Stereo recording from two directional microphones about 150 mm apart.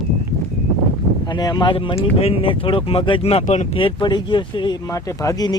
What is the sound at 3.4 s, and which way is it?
Speech, 50° left (ahead or behind).